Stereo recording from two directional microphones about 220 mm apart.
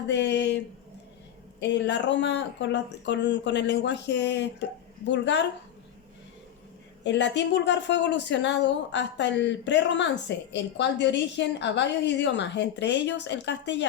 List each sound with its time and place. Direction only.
0.1 s speech: 50° left (ahead or behind)
1.6 s speech: 55° left (ahead or behind)
7.0 s speech: 55° left (ahead or behind)